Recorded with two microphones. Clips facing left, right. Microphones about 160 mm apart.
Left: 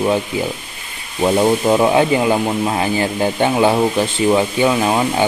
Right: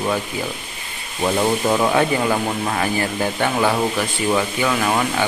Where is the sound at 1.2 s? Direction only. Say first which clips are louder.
Left 5 dB; 20° left (ahead or behind).